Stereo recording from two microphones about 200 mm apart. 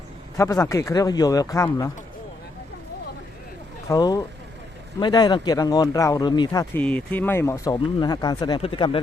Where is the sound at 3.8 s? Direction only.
15° left (ahead or behind).